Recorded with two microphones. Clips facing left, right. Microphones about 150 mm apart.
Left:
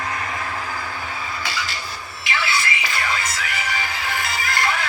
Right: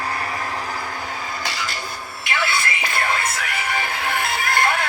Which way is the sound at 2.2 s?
55° right (ahead or behind).